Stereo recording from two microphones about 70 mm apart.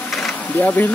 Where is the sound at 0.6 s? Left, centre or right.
Left.